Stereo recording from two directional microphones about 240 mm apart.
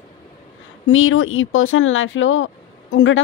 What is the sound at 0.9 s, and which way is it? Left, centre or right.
Speech, left.